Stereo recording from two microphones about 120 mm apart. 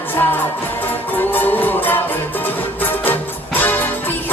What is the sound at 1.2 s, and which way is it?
Music, 15° left (ahead or behind).